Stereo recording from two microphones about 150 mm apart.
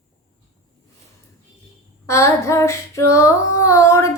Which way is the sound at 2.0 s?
20° left (ahead or behind).